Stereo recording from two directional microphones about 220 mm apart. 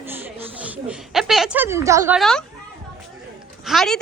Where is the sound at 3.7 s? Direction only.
Centre (ahead or behind).